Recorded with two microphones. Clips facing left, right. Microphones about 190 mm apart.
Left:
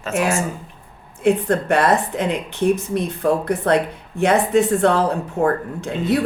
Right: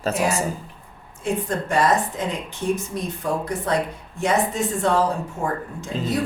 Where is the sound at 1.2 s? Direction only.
60° left (ahead or behind).